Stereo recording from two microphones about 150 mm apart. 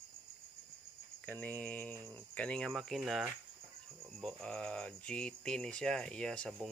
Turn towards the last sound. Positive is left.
turn(degrees=5)  # may be behind; listen again after turning